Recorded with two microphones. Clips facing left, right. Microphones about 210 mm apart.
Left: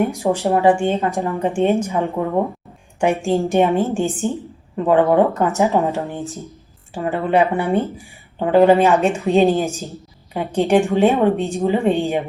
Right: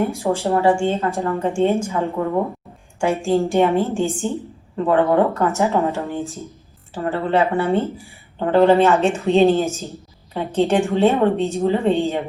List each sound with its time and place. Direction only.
0.0 s a woman's voice: 15° left (ahead or behind)
3.2 s a woman's voice: 15° left (ahead or behind)
9.0 s speech: centre (ahead or behind)
9.3 s a woman's voice: 15° left (ahead or behind)